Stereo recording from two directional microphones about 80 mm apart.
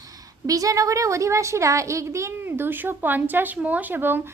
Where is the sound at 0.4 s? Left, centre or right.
Right.